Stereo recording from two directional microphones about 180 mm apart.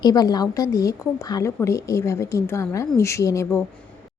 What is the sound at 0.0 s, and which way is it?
A woman's voice, 20° left (ahead or behind).